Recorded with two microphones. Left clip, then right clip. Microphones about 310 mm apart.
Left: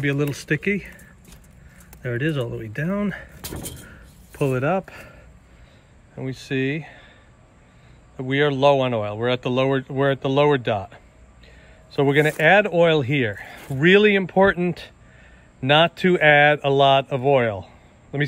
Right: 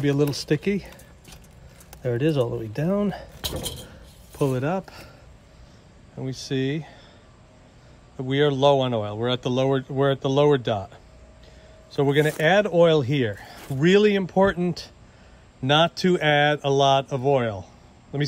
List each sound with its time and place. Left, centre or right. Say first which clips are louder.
0.0 s speech: right 1 dB; centre
6.1 s speech: left 2 dB; centre
8.2 s a man's voice: left 2 dB; centre